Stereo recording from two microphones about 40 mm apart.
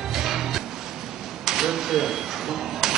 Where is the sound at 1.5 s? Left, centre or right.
Centre.